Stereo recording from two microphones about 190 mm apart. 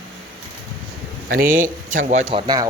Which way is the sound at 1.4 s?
45° right (ahead or behind).